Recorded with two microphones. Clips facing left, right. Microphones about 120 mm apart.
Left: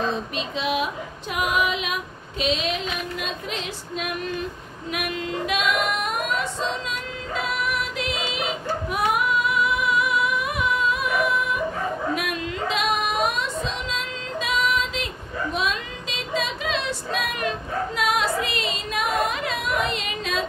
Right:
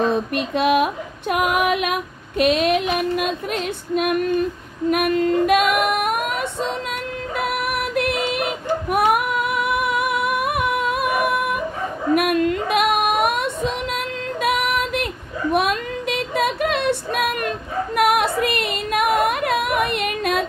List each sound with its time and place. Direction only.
0.0 s female singing: 55° right (ahead or behind)
1.3 s child singing: 60° right (ahead or behind)
4.9 s female singing: 50° right (ahead or behind)
7.3 s music: 60° right (ahead or behind)
12.2 s female singing: 55° right (ahead or behind)
15.5 s child singing: 60° right (ahead or behind)